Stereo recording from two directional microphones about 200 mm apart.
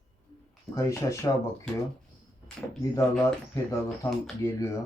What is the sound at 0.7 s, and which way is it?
Speech, 15° left (ahead or behind).